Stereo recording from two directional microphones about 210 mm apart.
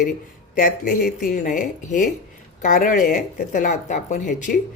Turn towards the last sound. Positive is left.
turn(degrees=35)  # may be behind; listen again after turning